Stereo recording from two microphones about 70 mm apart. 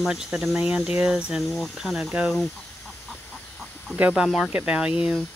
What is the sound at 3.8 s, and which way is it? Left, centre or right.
Speech, centre.